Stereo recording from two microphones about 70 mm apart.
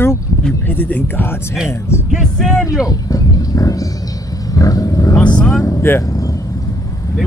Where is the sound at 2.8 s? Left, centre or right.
Left.